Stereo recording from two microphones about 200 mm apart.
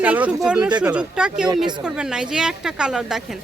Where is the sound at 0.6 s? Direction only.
20° right (ahead or behind).